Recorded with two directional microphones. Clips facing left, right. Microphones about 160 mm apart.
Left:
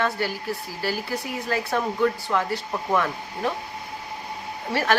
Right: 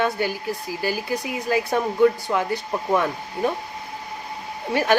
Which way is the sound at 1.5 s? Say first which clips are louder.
Right 3 dB; 15° right (ahead or behind).